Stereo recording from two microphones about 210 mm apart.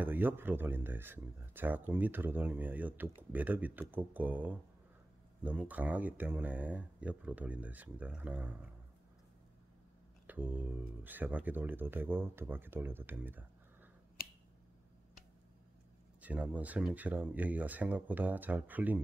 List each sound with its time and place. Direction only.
0.0 s speech: 10° right (ahead or behind)
10.2 s speech: 10° right (ahead or behind)
14.2 s finger snapping: 45° left (ahead or behind)
16.2 s speech: 5° right (ahead or behind)